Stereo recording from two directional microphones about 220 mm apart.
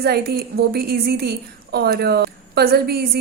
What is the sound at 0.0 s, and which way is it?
A woman's voice, 45° right (ahead or behind).